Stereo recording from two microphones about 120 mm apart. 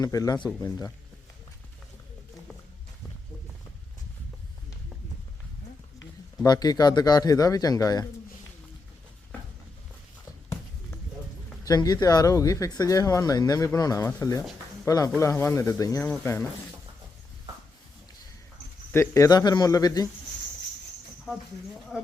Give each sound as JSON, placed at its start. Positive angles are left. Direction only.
{"t": 0.0, "sound": "speech", "side_deg": 30}
{"t": 6.4, "sound": "speech", "side_deg": 35}
{"t": 11.6, "sound": "speech", "side_deg": 30}
{"t": 18.9, "sound": "speech", "side_deg": 25}
{"t": 21.9, "sound": "speech", "side_deg": 0}